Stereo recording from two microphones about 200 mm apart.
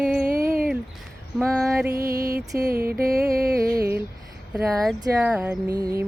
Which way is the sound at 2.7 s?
50° right (ahead or behind).